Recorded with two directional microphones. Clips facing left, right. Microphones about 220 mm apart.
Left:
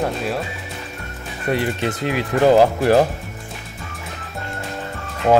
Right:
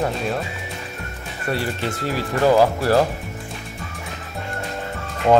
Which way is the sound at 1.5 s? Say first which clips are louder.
Left 4 dB; 20° left (ahead or behind).